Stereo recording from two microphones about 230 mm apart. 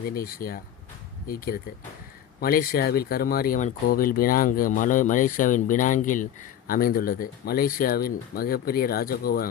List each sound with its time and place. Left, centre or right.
0.1 s speech: left